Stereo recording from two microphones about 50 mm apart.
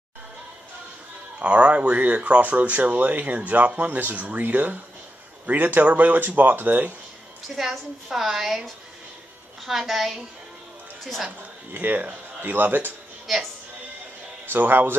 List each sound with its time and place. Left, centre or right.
1.4 s speech: right
7.5 s a woman's voice: centre
9.7 s a woman's voice: centre
11.2 s speech: right
14.4 s speech: right